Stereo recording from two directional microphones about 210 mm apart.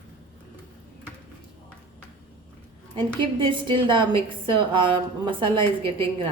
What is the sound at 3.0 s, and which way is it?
A woman's voice, 25° right (ahead or behind).